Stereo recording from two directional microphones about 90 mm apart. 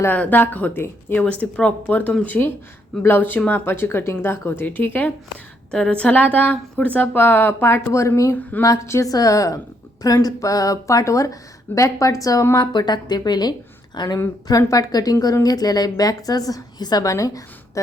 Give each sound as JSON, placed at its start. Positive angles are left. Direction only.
{"t": 0.0, "sound": "a woman's voice", "side_deg": 20}
{"t": 5.7, "sound": "a woman's voice", "side_deg": 10}
{"t": 12.5, "sound": "a woman's voice", "side_deg": 55}